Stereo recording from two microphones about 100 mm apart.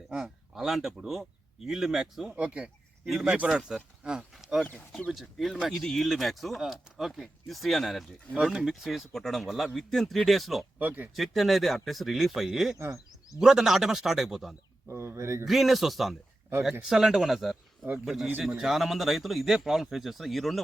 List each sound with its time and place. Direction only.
0.1 s speech: 5° right (ahead or behind)
4.9 s speech: 5° left (ahead or behind)
10.8 s speech: 15° right (ahead or behind)
11.1 s speech: centre (ahead or behind)
14.8 s speech: 25° right (ahead or behind)
15.4 s speech: centre (ahead or behind)